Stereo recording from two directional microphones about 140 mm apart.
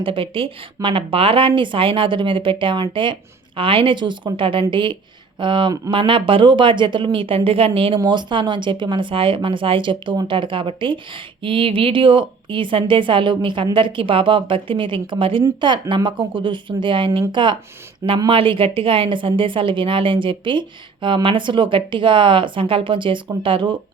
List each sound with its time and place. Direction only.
0.0 s speech: 40° right (ahead or behind)